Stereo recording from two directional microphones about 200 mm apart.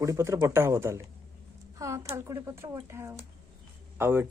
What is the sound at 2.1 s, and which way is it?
A man's voice, 15° right (ahead or behind).